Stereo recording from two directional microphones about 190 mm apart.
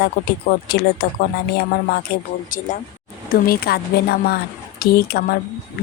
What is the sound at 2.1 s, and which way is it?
Speech, 55° left (ahead or behind).